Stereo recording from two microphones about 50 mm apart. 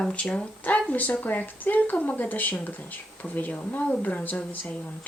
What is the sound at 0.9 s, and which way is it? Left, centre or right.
Speech, left.